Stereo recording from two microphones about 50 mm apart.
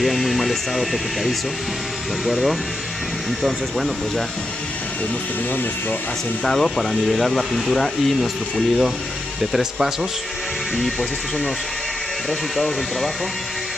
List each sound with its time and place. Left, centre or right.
0.0 s speech: centre
6.4 s speech: centre
10.8 s speech: centre